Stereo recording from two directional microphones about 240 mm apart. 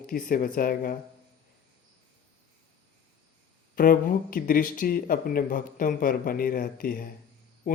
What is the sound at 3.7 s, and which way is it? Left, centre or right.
Speech, left.